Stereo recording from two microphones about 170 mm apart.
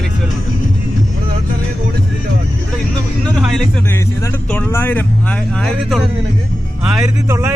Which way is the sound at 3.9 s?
10° left (ahead or behind).